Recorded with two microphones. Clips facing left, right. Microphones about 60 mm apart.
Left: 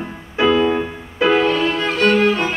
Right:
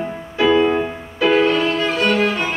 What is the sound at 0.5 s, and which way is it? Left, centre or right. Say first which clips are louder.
Music: right 1 dB; right.